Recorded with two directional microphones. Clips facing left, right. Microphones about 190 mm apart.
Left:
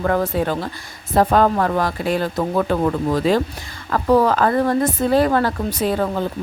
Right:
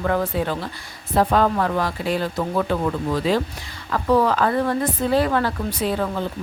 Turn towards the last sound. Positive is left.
turn(degrees=45)  # may be behind; listen again after turning